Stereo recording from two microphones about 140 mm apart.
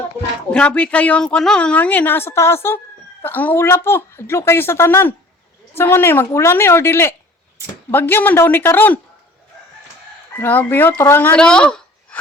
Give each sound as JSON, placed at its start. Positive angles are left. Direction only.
{"t": 0.5, "sound": "a woman's voice", "side_deg": 10}
{"t": 10.3, "sound": "a woman's voice", "side_deg": 15}